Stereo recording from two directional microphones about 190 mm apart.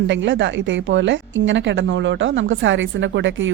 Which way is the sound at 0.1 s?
75° right (ahead or behind).